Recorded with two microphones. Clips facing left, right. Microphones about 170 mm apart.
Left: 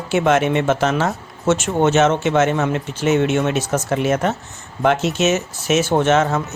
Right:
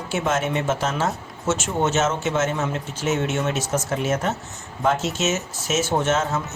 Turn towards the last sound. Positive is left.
turn(degrees=65)  # may be behind; listen again after turning